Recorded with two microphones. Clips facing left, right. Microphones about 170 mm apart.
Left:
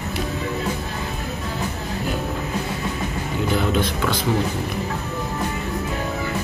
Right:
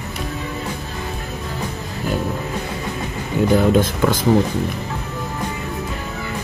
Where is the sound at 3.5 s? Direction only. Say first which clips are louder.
Right 6 dB; 45° right (ahead or behind).